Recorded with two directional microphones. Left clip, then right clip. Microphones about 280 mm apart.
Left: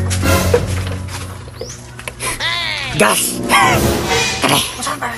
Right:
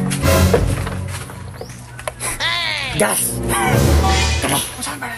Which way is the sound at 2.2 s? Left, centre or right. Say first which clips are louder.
Left 1 dB; centre.